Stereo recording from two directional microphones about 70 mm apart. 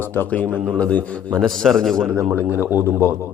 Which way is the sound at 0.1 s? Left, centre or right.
Left.